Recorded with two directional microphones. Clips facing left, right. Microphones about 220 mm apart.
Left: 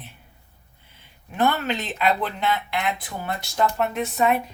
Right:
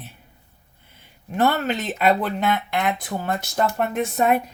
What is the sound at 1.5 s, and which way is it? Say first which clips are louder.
Speech: right 3 dB; 45° right (ahead or behind).